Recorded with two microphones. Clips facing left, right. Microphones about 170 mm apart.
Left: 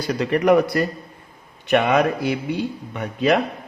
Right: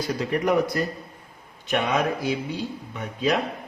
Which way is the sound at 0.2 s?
70° left (ahead or behind).